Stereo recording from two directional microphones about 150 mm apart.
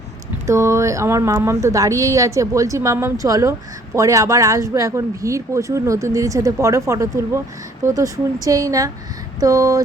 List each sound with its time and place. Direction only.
0.4 s speech: 20° right (ahead or behind)